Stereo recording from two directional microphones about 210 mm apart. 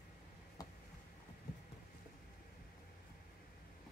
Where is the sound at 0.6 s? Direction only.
15° left (ahead or behind).